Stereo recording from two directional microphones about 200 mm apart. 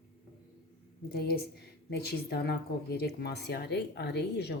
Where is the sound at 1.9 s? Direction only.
55° left (ahead or behind).